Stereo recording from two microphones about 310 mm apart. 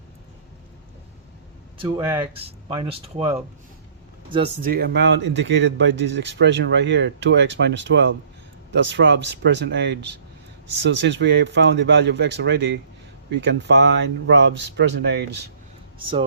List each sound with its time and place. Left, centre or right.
1.8 s speech: centre
4.7 s speech: right